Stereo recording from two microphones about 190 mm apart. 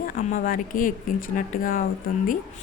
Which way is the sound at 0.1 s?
45° left (ahead or behind).